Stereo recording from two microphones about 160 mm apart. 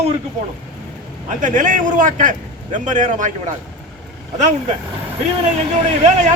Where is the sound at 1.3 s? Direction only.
55° right (ahead or behind).